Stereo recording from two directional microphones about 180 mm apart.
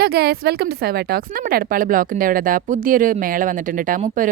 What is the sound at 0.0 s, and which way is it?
A woman's voice, 60° right (ahead or behind).